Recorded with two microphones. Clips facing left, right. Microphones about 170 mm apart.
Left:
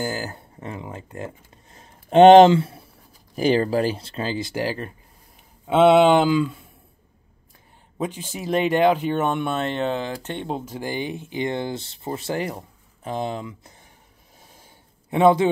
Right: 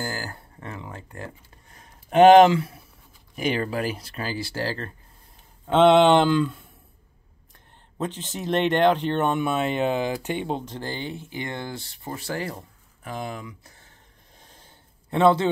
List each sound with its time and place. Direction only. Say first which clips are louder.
0.0 s speech: left 4 dB; 20° left (ahead or behind); by 6.7 s centre (ahead or behind)
8.0 s speech: left 1 dB; 10° left (ahead or behind)
14.4 s a sound: left 2 dB; 10° left (ahead or behind)